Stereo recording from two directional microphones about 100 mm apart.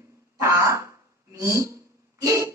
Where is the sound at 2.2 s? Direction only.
30° right (ahead or behind).